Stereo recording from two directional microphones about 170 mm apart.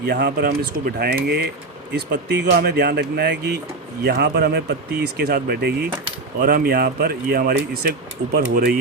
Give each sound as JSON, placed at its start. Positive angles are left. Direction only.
{"t": 0.0, "sound": "speech", "side_deg": -75}
{"t": 1.9, "sound": "speech", "side_deg": -90}